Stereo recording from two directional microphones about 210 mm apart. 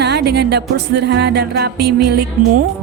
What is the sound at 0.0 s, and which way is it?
Music, 50° right (ahead or behind).